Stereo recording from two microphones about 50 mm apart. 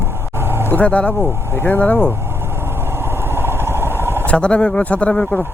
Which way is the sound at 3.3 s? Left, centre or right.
Right.